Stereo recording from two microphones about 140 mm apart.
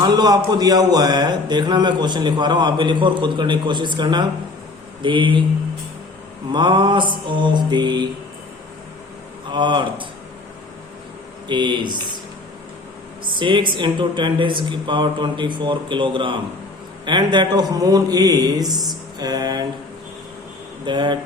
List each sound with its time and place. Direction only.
0.0 s speech: 30° right (ahead or behind)
6.5 s speech: 35° right (ahead or behind)
9.5 s speech: 35° right (ahead or behind)
11.4 s speech: 35° right (ahead or behind)
13.4 s speech: 35° right (ahead or behind)
20.8 s speech: 35° right (ahead or behind)